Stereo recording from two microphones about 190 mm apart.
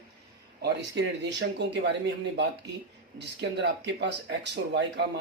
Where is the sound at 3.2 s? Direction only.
65° right (ahead or behind).